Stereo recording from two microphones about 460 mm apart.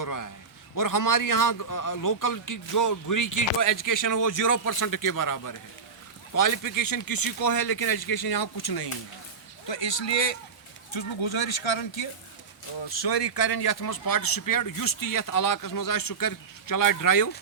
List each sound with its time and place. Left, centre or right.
0.0 s a man's voice: left
9.6 s a man's voice: left
10.9 s speech: left
12.9 s speech: left